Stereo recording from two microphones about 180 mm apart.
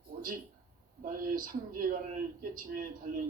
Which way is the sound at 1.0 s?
50° right (ahead or behind).